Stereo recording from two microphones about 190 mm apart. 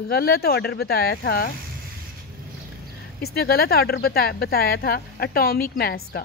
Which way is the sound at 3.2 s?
55° left (ahead or behind).